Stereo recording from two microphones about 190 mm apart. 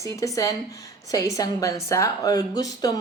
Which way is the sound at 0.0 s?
15° left (ahead or behind).